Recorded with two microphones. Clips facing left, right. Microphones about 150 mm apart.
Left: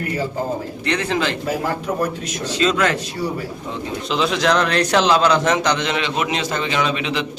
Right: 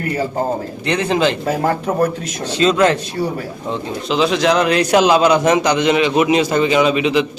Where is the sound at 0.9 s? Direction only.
20° right (ahead or behind).